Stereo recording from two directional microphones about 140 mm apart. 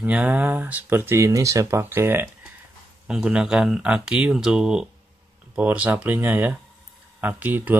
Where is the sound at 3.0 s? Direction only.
5° right (ahead or behind).